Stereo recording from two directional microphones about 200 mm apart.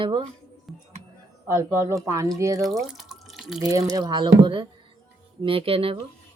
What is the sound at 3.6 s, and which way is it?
Speech, 15° right (ahead or behind).